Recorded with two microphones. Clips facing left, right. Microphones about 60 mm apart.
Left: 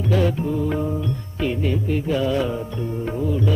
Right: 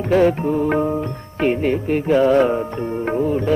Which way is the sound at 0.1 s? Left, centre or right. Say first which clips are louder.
Right 6 dB; right.